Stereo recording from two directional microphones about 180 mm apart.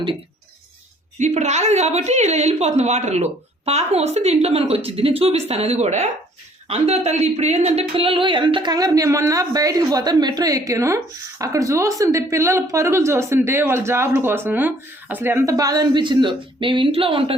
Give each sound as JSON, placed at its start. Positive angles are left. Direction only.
{"t": 1.2, "sound": "a woman's voice", "side_deg": -40}